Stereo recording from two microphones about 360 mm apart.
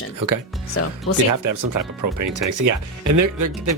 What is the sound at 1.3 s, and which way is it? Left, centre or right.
Speech, right.